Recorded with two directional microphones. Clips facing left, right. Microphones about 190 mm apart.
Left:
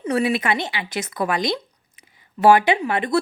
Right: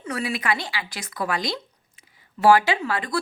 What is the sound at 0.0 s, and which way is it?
A woman's voice, 20° left (ahead or behind).